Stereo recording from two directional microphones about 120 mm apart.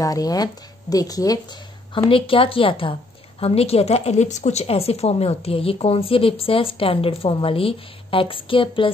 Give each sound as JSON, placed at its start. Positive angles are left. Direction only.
{"t": 0.0, "sound": "speech", "side_deg": 30}
{"t": 2.0, "sound": "a woman's voice", "side_deg": 50}